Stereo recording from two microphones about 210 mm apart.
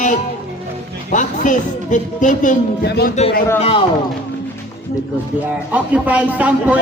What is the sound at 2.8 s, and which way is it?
Speech, 50° left (ahead or behind).